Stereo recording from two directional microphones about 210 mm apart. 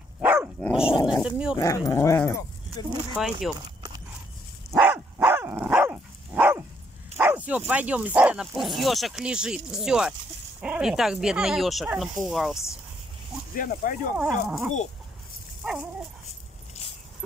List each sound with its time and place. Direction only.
0.2 s dog: 10° right (ahead or behind)
1.1 s speech: 5° right (ahead or behind)
1.6 s dog: 15° left (ahead or behind)
3.2 s speech: centre (ahead or behind)
4.7 s dog: 10° right (ahead or behind)
7.2 s speech: 10° right (ahead or behind)
13.6 s speech: 40° left (ahead or behind)
14.1 s speech: 5° right (ahead or behind)
15.6 s dog: centre (ahead or behind)